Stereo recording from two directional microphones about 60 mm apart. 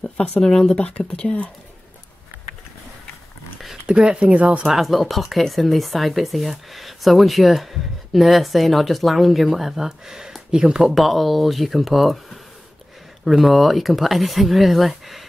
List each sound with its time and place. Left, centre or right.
0.4 s speech: centre
0.8 s speech: left
3.8 s speech: centre
4.6 s speech: centre
10.8 s speech: centre
13.2 s speech: centre